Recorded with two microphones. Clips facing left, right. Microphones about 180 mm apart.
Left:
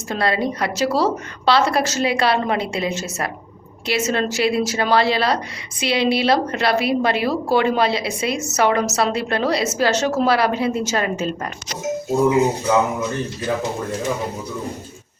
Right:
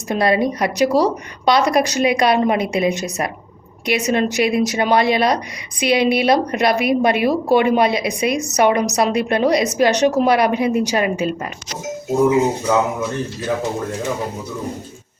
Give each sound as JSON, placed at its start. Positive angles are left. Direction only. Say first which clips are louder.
{"t": 0.1, "sound": "a woman's voice", "louder": "right 4 dB", "side_deg": -20}